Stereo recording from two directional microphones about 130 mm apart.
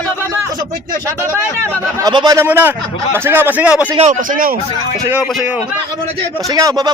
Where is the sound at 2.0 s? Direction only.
30° right (ahead or behind).